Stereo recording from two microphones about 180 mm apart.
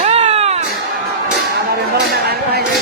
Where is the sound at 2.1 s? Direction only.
60° right (ahead or behind).